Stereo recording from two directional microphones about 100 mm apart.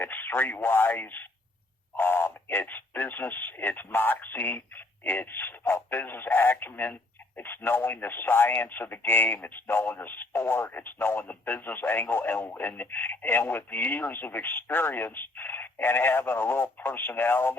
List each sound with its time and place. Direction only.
0.0 s speech: 20° left (ahead or behind)